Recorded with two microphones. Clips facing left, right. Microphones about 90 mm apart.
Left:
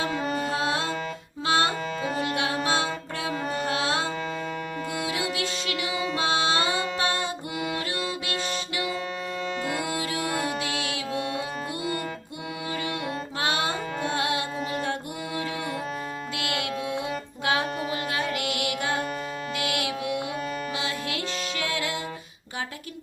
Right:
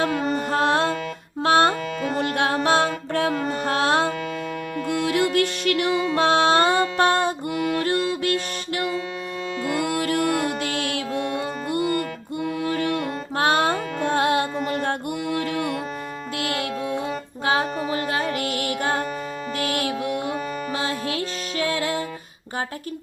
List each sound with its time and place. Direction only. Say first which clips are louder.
0.5 s music: right 6 dB; 60° right (ahead or behind)
2.6 s a capella: right 6 dB; 55° right (ahead or behind)
3.4 s music: right 5 dB; 50° right (ahead or behind)
10.6 s mantra: right 4 dB; 55° right (ahead or behind)
11.7 s music: right 7 dB; 55° right (ahead or behind)
16.4 s music: right 4 dB; 35° right (ahead or behind)